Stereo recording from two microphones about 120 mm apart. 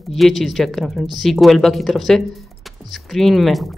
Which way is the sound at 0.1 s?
Centre (ahead or behind).